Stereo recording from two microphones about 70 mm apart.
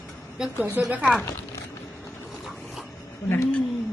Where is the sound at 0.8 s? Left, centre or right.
Right.